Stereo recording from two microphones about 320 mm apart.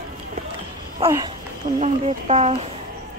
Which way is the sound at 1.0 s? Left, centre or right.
Centre.